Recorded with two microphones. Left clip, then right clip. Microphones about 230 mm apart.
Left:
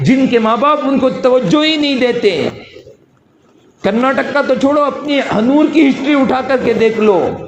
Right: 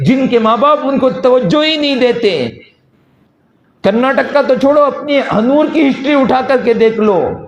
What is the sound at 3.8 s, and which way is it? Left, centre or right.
Speech, right.